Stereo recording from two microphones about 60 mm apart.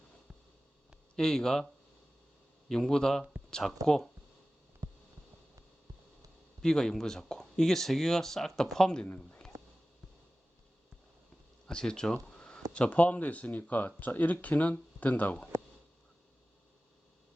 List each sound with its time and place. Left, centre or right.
1.1 s speech: centre
2.6 s speech: centre
4.8 s hum: right
6.6 s speech: centre
9.0 s speech: left
11.7 s speech: centre
12.2 s a sound: centre
12.7 s speech: left